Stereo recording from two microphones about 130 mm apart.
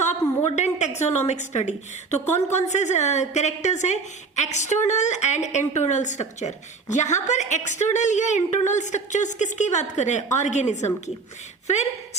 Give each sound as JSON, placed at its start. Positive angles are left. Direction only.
{"t": 0.0, "sound": "a woman's voice", "side_deg": 65}